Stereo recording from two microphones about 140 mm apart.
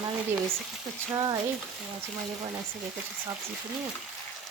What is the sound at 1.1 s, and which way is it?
Frying, 35° right (ahead or behind).